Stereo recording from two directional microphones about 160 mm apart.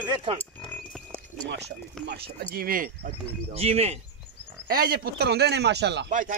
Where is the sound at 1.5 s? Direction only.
90° right.